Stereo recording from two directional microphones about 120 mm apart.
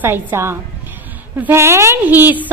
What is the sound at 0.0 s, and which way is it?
A woman's voice, 20° right (ahead or behind).